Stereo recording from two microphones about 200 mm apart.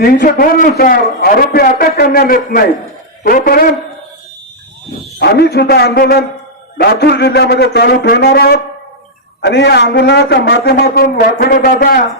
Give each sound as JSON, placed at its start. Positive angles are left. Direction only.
{"t": 0.0, "sound": "a man's voice", "side_deg": 45}
{"t": 5.2, "sound": "a man's voice", "side_deg": 55}